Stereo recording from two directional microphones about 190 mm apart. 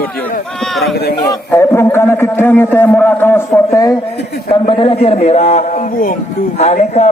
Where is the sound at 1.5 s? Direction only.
10° left (ahead or behind).